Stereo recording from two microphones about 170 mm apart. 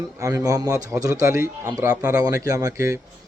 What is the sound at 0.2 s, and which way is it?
A man's voice, 20° right (ahead or behind).